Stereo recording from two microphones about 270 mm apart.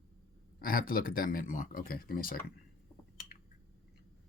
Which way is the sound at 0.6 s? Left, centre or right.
Left.